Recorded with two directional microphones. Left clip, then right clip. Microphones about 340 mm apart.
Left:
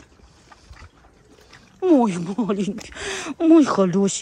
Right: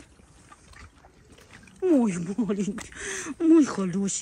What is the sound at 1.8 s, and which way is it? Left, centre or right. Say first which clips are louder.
A woman's voice: left 6 dB; centre.